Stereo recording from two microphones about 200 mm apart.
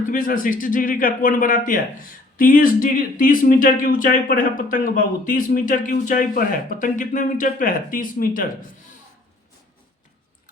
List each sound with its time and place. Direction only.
0.0 s speech: 40° left (ahead or behind)